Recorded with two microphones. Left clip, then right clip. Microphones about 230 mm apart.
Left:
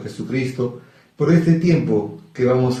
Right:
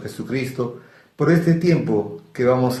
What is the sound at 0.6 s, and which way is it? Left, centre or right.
A man's voice, right.